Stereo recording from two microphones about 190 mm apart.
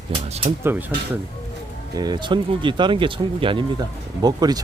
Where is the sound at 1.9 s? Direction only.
20° right (ahead or behind).